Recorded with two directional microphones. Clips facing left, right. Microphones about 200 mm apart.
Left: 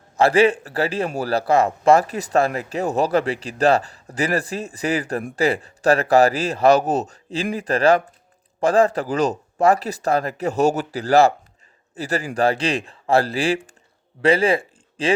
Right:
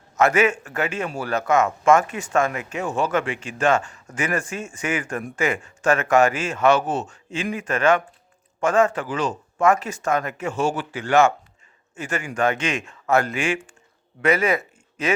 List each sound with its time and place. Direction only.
0.2 s a man's voice: 30° left (ahead or behind)